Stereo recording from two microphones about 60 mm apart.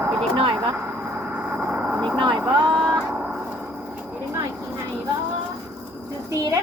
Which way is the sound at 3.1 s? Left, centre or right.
Right.